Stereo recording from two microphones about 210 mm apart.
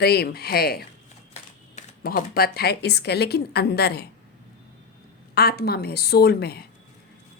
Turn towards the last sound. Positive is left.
turn(degrees=50)  # may be behind; listen again after turning